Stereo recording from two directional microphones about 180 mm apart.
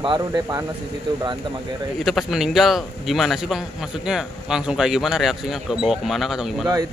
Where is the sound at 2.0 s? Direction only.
Centre (ahead or behind).